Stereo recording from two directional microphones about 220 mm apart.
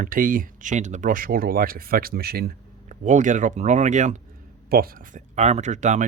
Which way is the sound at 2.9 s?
35° right (ahead or behind).